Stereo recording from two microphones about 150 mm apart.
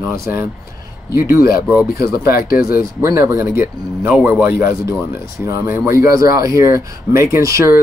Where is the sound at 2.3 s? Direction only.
75° left (ahead or behind).